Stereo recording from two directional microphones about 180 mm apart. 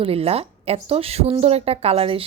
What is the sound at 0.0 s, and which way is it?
Speech, 35° right (ahead or behind).